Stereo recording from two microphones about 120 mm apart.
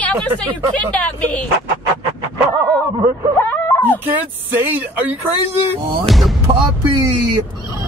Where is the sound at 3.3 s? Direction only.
15° left (ahead or behind).